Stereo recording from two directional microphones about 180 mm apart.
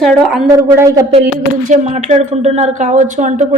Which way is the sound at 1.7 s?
40° right (ahead or behind).